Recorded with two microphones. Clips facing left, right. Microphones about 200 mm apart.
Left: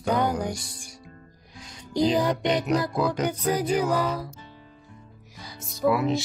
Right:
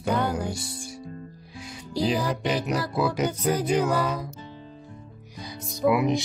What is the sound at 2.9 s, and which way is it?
Speech, 10° right (ahead or behind).